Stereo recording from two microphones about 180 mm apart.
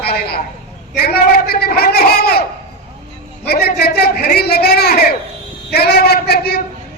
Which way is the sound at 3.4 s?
60° left (ahead or behind).